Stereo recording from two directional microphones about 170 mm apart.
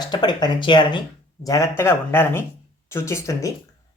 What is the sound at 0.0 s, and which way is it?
Speech, 25° left (ahead or behind).